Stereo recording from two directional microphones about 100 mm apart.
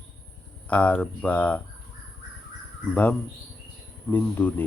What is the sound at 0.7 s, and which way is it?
Speech, 15° left (ahead or behind).